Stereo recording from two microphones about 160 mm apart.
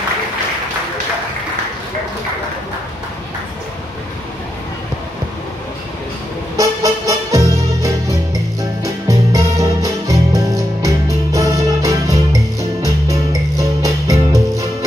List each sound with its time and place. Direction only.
6.5 s music: 20° right (ahead or behind)